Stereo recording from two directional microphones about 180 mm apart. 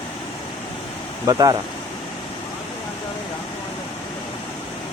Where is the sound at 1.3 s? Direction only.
20° right (ahead or behind).